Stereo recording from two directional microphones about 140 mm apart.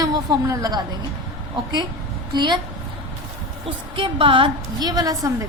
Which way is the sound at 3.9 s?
40° right (ahead or behind).